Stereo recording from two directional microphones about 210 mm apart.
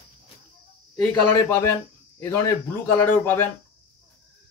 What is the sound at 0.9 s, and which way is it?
Speech, 5° left (ahead or behind).